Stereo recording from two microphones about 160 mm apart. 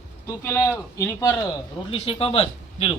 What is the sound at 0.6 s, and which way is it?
Speech, 15° left (ahead or behind).